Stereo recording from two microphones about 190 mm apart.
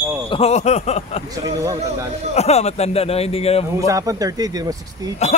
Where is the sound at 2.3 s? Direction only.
35° left (ahead or behind).